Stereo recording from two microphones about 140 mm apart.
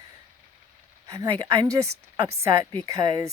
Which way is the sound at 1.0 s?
25° right (ahead or behind).